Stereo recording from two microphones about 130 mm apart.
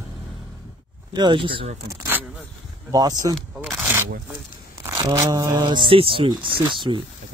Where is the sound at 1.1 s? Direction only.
35° right (ahead or behind).